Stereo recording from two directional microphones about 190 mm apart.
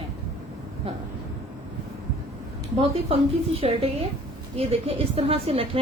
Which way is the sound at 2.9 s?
30° right (ahead or behind).